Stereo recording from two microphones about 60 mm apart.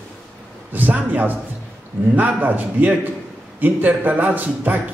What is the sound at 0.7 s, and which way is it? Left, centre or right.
A man's voice, right.